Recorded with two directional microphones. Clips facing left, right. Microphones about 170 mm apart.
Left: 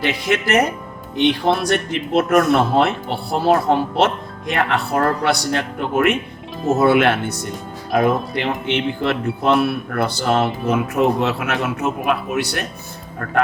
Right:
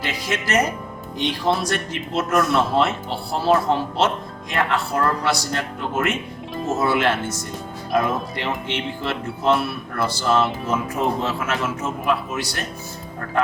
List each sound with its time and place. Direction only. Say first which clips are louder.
0.0 s speech: left 6 dB; 65° left (ahead or behind)